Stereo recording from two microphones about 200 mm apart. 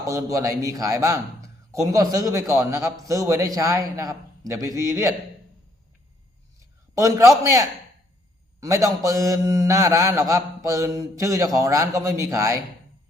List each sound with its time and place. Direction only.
0.1 s mantra: 15° right (ahead or behind)
6.9 s mantra: 15° right (ahead or behind)